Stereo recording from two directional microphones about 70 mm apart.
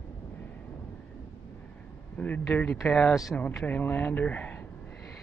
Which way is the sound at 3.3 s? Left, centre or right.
Left.